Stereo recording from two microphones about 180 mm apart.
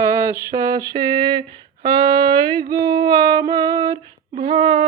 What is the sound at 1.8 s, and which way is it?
Female singing, 20° right (ahead or behind).